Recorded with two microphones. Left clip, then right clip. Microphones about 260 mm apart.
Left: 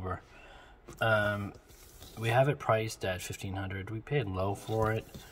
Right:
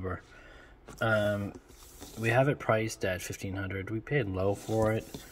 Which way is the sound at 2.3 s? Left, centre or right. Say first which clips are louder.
Right 1 dB; left.